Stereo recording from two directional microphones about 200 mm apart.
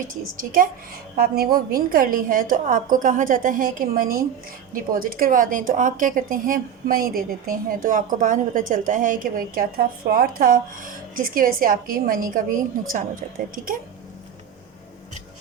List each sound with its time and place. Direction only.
0.0 s a woman's voice: 45° right (ahead or behind)